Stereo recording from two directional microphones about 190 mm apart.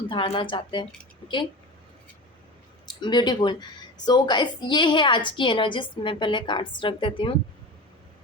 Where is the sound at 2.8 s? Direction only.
25° left (ahead or behind).